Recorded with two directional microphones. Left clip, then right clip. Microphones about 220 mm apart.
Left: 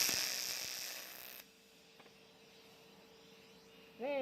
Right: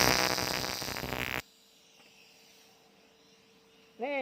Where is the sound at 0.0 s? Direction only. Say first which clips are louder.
Right 10 dB; 10° right (ahead or behind).